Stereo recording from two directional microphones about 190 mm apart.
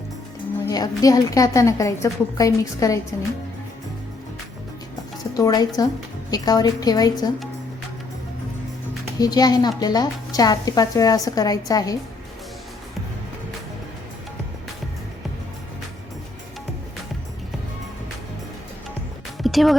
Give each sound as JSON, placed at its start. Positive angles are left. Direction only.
{"t": 0.7, "sound": "a woman's voice", "side_deg": 20}
{"t": 5.3, "sound": "speech", "side_deg": 20}
{"t": 9.1, "sound": "speech", "side_deg": 20}
{"t": 19.4, "sound": "music", "side_deg": 0}